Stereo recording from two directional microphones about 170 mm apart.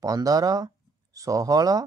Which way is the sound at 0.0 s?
20° right (ahead or behind).